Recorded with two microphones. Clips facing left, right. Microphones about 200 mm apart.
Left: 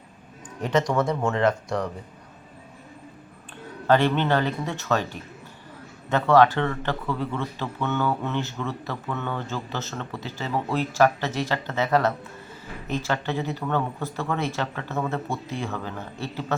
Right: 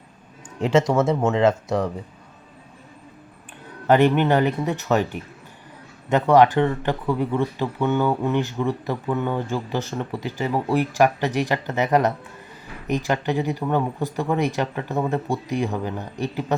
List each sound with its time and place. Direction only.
0.6 s speech: 25° right (ahead or behind)
3.8 s speech: 15° right (ahead or behind)